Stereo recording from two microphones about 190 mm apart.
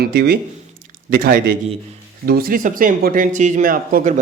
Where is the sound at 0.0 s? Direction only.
60° right (ahead or behind).